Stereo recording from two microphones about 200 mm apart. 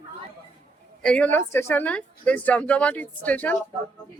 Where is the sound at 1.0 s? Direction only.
5° left (ahead or behind).